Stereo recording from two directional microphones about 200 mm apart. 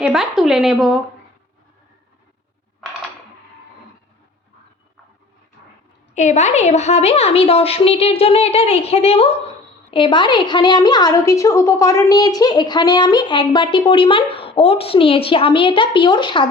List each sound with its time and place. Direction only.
0.0 s speech: centre (ahead or behind)
6.1 s a woman's voice: 35° left (ahead or behind)